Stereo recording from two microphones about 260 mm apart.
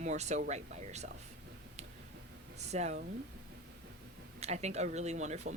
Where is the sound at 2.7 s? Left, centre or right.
Right.